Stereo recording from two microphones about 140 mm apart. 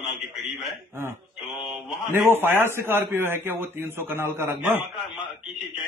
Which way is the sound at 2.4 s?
15° right (ahead or behind).